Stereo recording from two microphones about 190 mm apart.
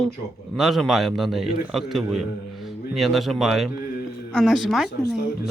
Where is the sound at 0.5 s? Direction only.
Centre (ahead or behind).